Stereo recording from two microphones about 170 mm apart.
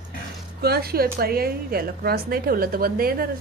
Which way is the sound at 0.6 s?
65° right (ahead or behind).